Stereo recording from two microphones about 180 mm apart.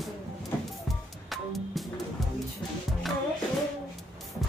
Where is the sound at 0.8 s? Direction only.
Centre (ahead or behind).